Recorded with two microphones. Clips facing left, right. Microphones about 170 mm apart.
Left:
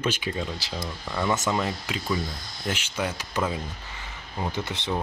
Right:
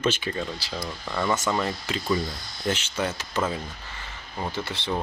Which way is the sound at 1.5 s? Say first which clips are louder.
Even; 15° left (ahead or behind).